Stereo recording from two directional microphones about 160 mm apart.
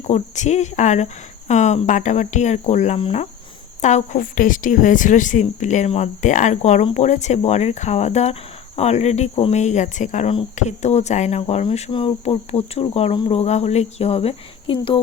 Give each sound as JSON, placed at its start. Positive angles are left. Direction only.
{"t": 0.1, "sound": "speech", "side_deg": 45}